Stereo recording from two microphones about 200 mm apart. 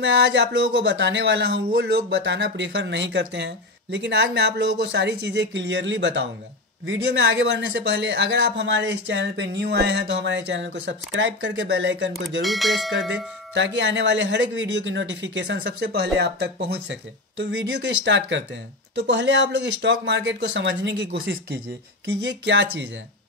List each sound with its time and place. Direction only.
0.0 s speech: 60° right (ahead or behind)
12.4 s speech: centre (ahead or behind)
13.6 s speech: 65° right (ahead or behind)